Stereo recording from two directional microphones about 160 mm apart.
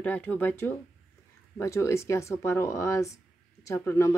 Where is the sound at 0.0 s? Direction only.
10° left (ahead or behind).